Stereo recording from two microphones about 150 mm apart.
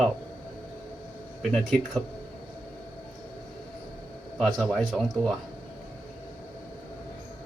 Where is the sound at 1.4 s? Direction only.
Centre (ahead or behind).